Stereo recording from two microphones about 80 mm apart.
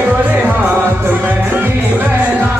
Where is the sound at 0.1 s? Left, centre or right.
Right.